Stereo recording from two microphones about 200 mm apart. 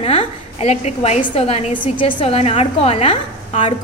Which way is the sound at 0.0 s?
30° left (ahead or behind).